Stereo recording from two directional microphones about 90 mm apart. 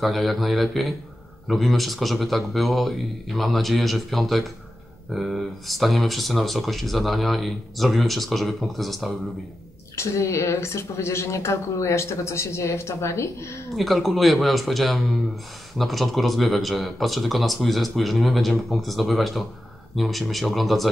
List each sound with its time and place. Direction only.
0.0 s speech: centre (ahead or behind)
9.9 s a woman's voice: 35° left (ahead or behind)
13.7 s speech: centre (ahead or behind)